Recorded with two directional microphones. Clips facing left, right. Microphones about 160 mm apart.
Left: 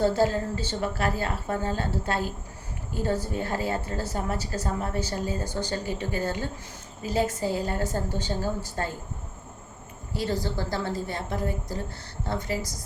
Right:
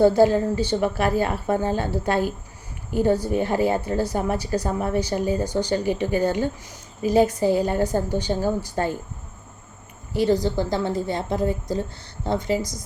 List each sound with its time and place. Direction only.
0.0 s a woman's voice: 15° right (ahead or behind)
10.2 s a woman's voice: 20° right (ahead or behind)